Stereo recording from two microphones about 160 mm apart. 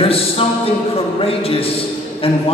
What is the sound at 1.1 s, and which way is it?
Speech, 35° left (ahead or behind).